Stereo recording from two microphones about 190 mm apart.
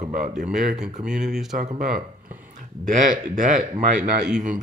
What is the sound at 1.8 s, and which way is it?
Speech, 45° right (ahead or behind).